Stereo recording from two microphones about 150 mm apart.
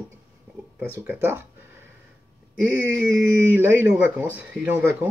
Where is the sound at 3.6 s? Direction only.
10° right (ahead or behind).